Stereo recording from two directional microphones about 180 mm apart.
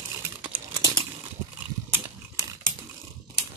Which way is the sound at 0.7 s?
20° right (ahead or behind).